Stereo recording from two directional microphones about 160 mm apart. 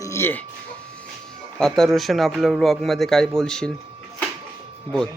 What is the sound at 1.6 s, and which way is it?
A man's voice, centre (ahead or behind).